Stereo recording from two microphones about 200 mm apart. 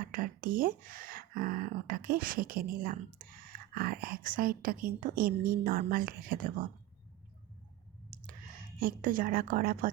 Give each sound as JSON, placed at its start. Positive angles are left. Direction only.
{"t": 0.0, "sound": "speech", "side_deg": -45}
{"t": 8.8, "sound": "speech", "side_deg": -45}